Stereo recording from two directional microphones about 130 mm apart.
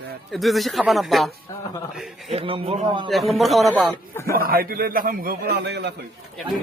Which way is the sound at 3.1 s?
Centre (ahead or behind).